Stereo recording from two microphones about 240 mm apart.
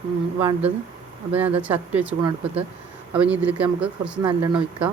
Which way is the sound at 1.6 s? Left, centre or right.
Centre.